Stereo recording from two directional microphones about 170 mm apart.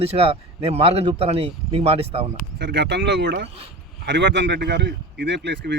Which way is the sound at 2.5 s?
85° right.